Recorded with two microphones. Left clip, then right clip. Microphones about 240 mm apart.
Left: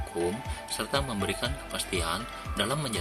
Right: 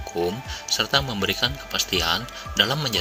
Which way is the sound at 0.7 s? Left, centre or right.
Centre.